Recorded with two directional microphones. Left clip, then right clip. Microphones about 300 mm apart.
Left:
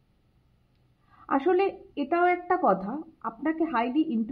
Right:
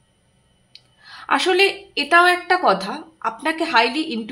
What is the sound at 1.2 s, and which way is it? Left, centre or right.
A woman's voice, centre.